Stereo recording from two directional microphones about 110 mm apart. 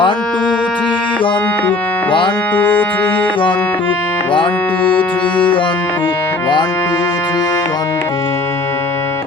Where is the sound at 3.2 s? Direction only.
50° left (ahead or behind).